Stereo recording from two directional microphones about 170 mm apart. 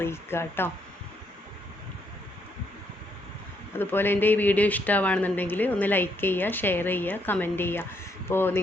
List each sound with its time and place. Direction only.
0.0 s speech: 15° left (ahead or behind)
3.8 s speech: 10° left (ahead or behind)